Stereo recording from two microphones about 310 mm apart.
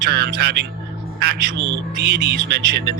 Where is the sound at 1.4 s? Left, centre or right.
Right.